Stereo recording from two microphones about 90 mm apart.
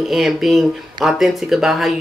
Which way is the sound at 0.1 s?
Centre (ahead or behind).